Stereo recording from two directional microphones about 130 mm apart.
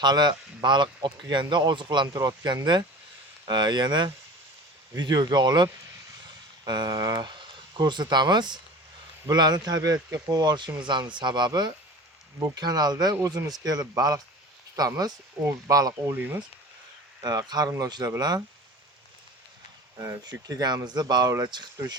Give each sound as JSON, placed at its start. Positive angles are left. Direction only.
{"t": 0.0, "sound": "speech", "side_deg": -35}
{"t": 16.1, "sound": "speech", "side_deg": -15}
{"t": 17.2, "sound": "speech", "side_deg": -30}
{"t": 20.0, "sound": "speech", "side_deg": -25}